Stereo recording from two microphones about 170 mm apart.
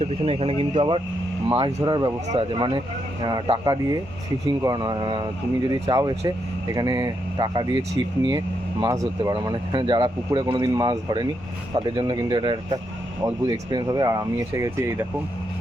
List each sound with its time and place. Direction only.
0.0 s speech: 35° right (ahead or behind); by 15.0 s 15° right (ahead or behind)